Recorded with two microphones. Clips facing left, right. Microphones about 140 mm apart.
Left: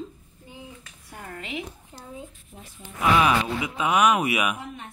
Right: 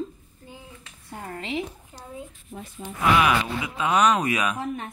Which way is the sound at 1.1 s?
30° right (ahead or behind).